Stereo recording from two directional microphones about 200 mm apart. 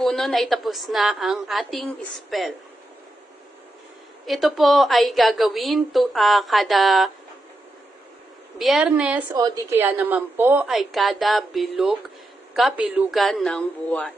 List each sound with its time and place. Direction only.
0.0 s a woman's voice: centre (ahead or behind)
4.3 s a woman's voice: centre (ahead or behind)
8.5 s a woman's voice: centre (ahead or behind)
9.3 s a woman's voice: 15° right (ahead or behind); by 14.1 s 5° left (ahead or behind)